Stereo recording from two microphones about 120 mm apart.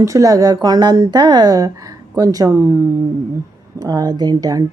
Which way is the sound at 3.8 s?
35° right (ahead or behind).